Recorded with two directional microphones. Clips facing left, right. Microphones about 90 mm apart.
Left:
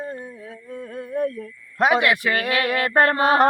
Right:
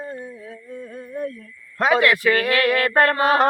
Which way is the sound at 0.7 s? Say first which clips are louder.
Left 4 dB; 60° left (ahead or behind).